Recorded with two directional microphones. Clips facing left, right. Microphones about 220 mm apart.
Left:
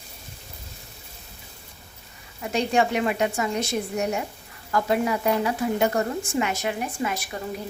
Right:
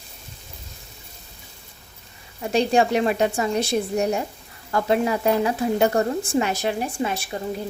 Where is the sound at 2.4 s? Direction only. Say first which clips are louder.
Right 3 dB; 30° right (ahead or behind).